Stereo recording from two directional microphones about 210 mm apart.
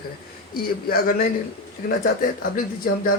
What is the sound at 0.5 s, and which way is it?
Speech, 45° left (ahead or behind).